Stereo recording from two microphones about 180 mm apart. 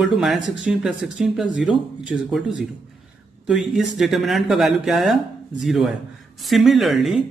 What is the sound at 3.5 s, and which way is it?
Speech, centre (ahead or behind).